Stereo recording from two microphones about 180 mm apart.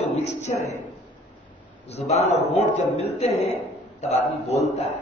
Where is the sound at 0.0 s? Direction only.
35° left (ahead or behind).